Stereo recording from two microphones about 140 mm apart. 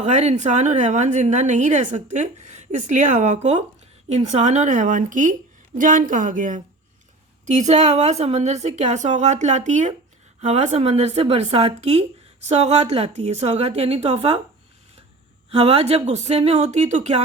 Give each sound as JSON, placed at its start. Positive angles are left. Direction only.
{"t": 0.0, "sound": "a woman's voice", "side_deg": -55}
{"t": 7.4, "sound": "a woman's voice", "side_deg": -55}
{"t": 15.4, "sound": "speech", "side_deg": -45}